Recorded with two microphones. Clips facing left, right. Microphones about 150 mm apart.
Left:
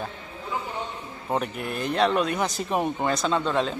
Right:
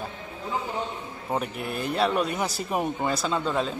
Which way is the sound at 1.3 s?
Centre (ahead or behind).